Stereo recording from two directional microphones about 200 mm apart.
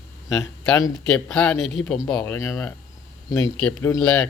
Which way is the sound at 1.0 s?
5° left (ahead or behind).